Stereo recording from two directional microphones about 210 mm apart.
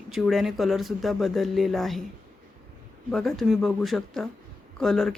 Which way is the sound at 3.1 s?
Centre (ahead or behind).